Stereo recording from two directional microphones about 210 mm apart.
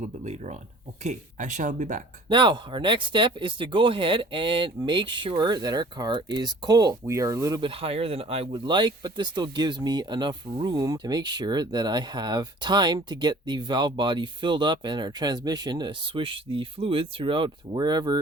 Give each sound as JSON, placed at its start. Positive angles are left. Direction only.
{"t": 0.0, "sound": "speech", "side_deg": -30}
{"t": 2.3, "sound": "speech", "side_deg": -20}